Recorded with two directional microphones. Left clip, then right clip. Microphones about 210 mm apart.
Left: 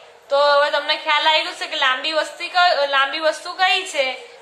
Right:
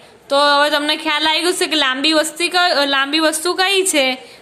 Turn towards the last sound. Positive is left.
turn(degrees=-50)  # may be behind; listen again after turning